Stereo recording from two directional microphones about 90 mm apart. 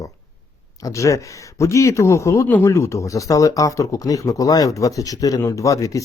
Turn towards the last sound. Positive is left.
turn(degrees=35)  # may be behind; listen again after turning